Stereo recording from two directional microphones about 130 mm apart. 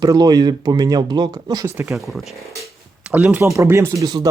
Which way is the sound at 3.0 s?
10° right (ahead or behind).